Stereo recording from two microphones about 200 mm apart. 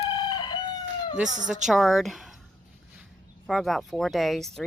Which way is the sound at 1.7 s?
Centre (ahead or behind).